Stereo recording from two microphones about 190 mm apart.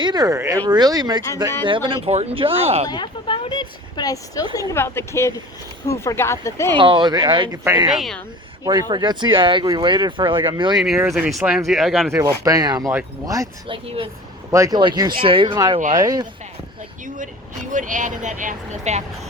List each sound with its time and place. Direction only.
0.0 s speech: 20° right (ahead or behind)
2.9 s speech: 25° left (ahead or behind)
6.7 s speech: 25° right (ahead or behind)
7.9 s speech: centre (ahead or behind)
8.6 s speech: 20° right (ahead or behind)
10.8 s speech: centre (ahead or behind)
12.1 s speech: 15° right (ahead or behind)
13.8 s speech: 30° right (ahead or behind)
14.5 s speech: 20° right (ahead or behind)
17.7 s speech: 45° right (ahead or behind)